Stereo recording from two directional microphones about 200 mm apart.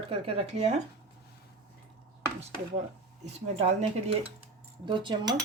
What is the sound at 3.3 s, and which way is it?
Speech, 35° right (ahead or behind).